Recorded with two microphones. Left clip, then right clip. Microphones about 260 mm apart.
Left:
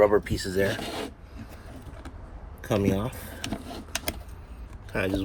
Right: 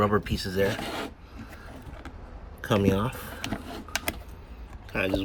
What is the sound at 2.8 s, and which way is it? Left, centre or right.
Speech, right.